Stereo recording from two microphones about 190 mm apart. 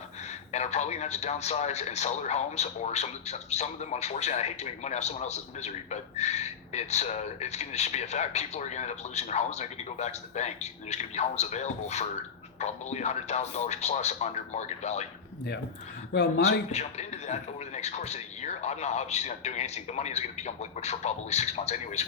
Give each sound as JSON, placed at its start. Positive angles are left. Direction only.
{"t": 0.3, "sound": "speech", "side_deg": 35}
{"t": 16.4, "sound": "speech", "side_deg": 35}